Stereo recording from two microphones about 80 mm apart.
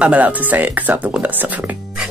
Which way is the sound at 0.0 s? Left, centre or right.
Centre.